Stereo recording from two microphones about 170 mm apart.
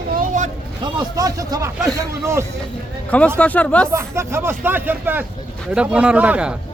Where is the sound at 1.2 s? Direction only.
20° right (ahead or behind).